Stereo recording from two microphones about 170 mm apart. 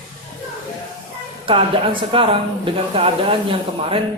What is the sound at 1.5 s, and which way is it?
Speech, 30° right (ahead or behind).